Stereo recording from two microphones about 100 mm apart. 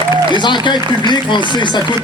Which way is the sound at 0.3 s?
50° left (ahead or behind).